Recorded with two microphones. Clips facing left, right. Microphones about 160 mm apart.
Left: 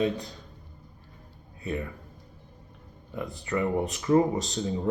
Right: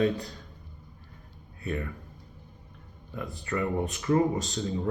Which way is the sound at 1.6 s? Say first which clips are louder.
Left 1 dB; 15° left (ahead or behind).